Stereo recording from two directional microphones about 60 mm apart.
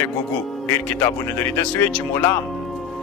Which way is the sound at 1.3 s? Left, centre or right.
Left.